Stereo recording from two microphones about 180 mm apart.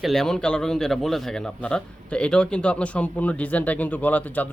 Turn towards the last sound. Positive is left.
turn(degrees=10)  # may be behind; listen again after turning